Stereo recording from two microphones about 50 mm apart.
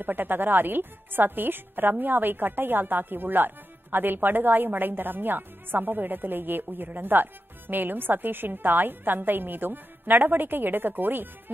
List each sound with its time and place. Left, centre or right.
0.0 s speech: right